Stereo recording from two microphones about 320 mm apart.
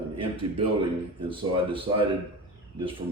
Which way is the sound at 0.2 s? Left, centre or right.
Centre.